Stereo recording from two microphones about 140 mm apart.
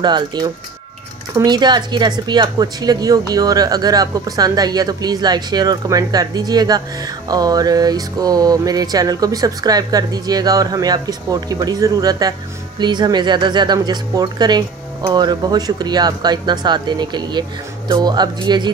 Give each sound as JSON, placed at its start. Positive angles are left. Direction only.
{"t": 0.0, "sound": "speech", "side_deg": -30}
{"t": 1.3, "sound": "music", "side_deg": -30}